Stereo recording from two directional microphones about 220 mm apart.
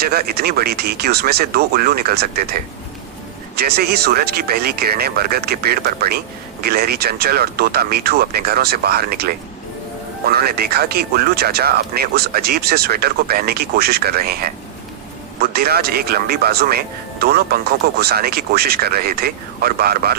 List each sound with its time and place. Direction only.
0.0 s speech: 45° right (ahead or behind)